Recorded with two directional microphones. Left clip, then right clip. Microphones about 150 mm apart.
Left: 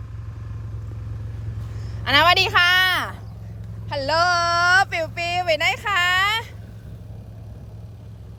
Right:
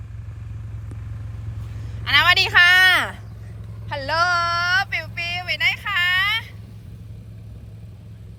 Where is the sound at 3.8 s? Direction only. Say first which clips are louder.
Left 1 dB; 25° left (ahead or behind); by 6.4 s 55° left (ahead or behind).